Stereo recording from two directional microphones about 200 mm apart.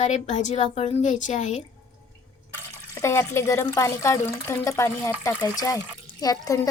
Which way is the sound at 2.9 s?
15° left (ahead or behind).